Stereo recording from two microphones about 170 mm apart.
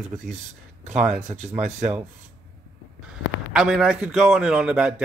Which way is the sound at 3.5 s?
5° right (ahead or behind).